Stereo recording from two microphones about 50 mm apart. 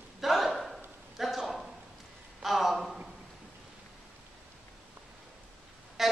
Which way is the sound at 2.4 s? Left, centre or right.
Centre.